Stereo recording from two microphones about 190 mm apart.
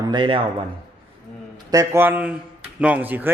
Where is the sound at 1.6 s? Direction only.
15° right (ahead or behind).